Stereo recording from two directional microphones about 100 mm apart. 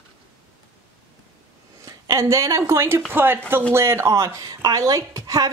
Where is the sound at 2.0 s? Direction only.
30° right (ahead or behind).